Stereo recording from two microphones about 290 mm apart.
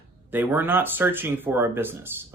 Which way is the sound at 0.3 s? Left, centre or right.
Centre.